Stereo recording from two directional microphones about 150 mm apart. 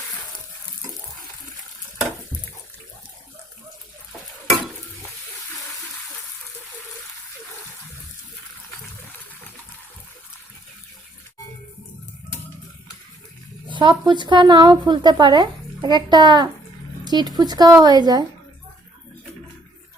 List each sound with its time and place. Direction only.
13.7 s speech: 30° right (ahead or behind)